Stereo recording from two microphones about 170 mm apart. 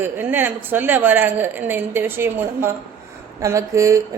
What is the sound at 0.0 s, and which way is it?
A woman's voice, 10° right (ahead or behind).